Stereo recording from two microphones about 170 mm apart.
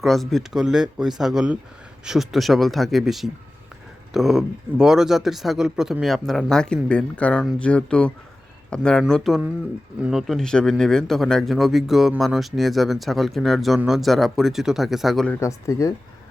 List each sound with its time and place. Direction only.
0.0 s speech: centre (ahead or behind)
15.4 s speech: 15° left (ahead or behind)